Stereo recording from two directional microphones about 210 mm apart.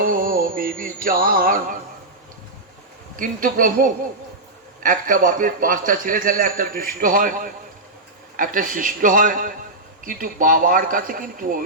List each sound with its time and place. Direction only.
0.0 s music: 40° right (ahead or behind)
3.2 s a man's voice: 40° right (ahead or behind)